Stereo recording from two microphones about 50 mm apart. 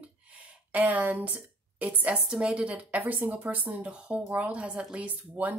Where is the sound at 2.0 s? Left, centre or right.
Right.